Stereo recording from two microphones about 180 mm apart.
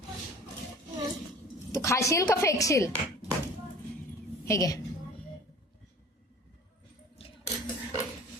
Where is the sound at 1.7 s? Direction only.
15° left (ahead or behind).